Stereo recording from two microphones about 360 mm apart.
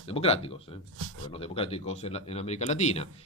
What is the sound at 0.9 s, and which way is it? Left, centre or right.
Speech, right.